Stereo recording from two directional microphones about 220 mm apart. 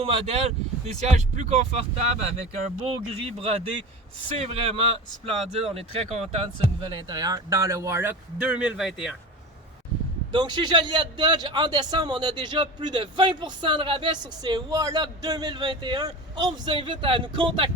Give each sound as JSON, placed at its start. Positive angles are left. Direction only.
{"t": 0.0, "sound": "a man's voice", "side_deg": -25}
{"t": 10.3, "sound": "a man's voice", "side_deg": -20}